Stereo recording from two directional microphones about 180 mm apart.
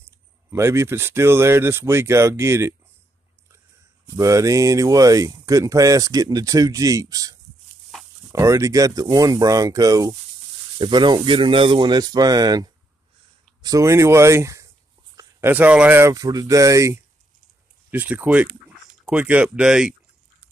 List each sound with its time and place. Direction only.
0.5 s speech: 15° right (ahead or behind)
4.1 s speech: 20° right (ahead or behind)